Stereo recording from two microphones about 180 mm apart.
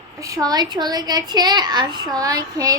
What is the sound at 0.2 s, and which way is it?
A woman's voice, 20° right (ahead or behind).